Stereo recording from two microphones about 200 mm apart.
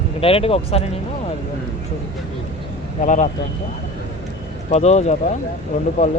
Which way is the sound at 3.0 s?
40° left (ahead or behind).